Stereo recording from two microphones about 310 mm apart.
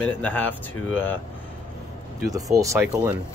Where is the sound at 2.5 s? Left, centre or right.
Centre.